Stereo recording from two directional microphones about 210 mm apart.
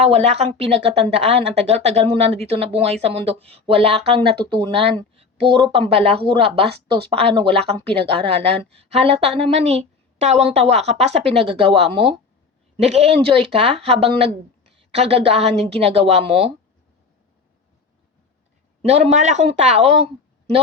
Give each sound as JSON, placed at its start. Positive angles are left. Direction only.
{"t": 0.1, "sound": "speech", "side_deg": -30}
{"t": 18.8, "sound": "speech", "side_deg": -30}